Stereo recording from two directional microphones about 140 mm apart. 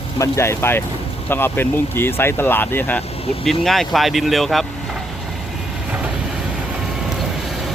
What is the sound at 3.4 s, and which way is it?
Speech, centre (ahead or behind).